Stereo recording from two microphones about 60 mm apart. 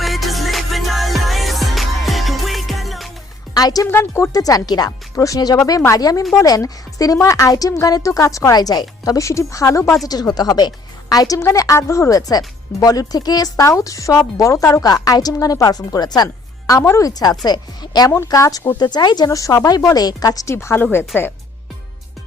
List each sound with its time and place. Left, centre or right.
0.0 s music: centre
3.5 s speech: left
3.8 s speech: left
4.3 s speech: left
5.1 s a woman's voice: left
10.1 s speech: left
11.5 s speech: left
13.7 s a woman's voice: left
18.3 s a woman's voice: left
19.6 s speech: left
20.5 s speech: left
21.1 s speech: left